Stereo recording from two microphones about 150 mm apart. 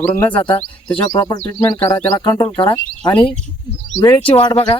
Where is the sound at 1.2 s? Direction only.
25° left (ahead or behind).